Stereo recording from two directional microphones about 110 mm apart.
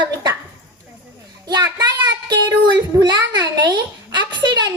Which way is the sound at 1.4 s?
40° right (ahead or behind).